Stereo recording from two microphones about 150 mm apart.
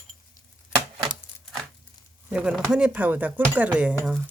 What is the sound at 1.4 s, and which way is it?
Crumpling, centre (ahead or behind).